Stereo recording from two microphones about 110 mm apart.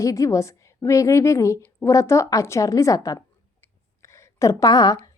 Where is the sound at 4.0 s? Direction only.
25° left (ahead or behind).